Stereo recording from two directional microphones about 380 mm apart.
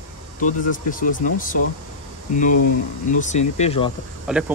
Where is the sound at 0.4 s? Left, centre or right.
Left.